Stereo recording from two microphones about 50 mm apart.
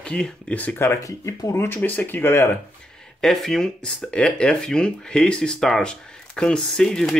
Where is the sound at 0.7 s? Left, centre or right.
Left.